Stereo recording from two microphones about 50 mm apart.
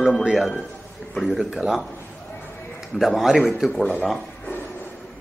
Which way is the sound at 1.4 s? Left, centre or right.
Centre.